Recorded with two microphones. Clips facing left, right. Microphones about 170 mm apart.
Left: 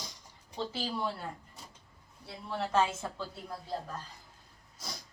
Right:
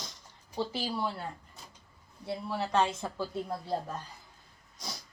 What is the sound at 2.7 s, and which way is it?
Speech, 5° left (ahead or behind).